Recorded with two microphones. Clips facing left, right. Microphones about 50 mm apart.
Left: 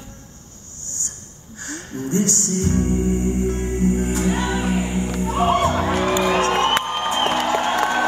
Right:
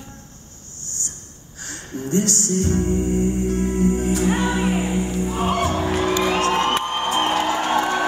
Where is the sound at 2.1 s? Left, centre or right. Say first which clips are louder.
Right 1 dB; left.